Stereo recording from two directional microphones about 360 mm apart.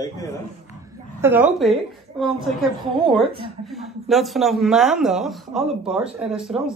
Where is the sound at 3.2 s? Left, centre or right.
Centre.